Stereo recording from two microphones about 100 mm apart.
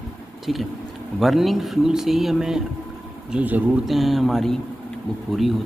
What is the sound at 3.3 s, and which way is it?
Speech, 15° right (ahead or behind).